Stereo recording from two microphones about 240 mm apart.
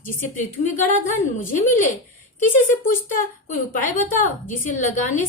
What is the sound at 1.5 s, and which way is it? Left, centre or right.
A woman's voice, left.